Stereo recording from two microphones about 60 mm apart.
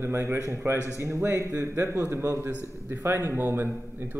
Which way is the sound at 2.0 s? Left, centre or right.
Right.